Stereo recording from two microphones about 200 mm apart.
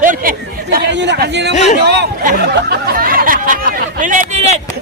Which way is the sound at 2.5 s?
50° right (ahead or behind).